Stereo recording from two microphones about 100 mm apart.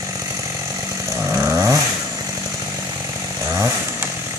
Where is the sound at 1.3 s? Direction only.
25° right (ahead or behind).